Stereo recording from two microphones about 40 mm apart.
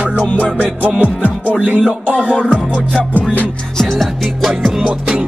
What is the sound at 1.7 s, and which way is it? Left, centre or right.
Music, centre.